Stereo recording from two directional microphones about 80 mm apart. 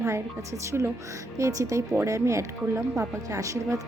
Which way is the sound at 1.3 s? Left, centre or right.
Right.